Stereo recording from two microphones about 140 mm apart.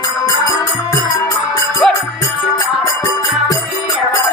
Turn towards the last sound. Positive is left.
turn(degrees=25)  # may be behind; listen again after turning